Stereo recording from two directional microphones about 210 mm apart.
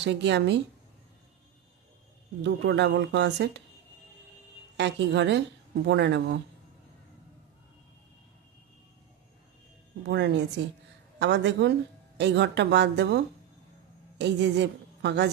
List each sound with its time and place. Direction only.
0.0 s speech: 55° right (ahead or behind)
2.4 s speech: 55° right (ahead or behind)
4.7 s speech: 55° right (ahead or behind)
10.0 s a woman's voice: 55° right (ahead or behind)